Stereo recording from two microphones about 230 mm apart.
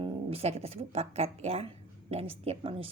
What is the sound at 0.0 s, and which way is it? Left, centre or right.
A woman's voice, right.